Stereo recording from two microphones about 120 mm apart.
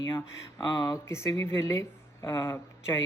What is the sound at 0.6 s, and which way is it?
Speech, 30° left (ahead or behind).